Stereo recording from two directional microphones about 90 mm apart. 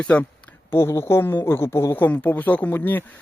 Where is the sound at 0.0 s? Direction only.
15° left (ahead or behind).